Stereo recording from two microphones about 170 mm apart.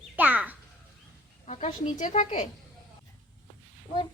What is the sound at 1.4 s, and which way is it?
Speech, 45° left (ahead or behind).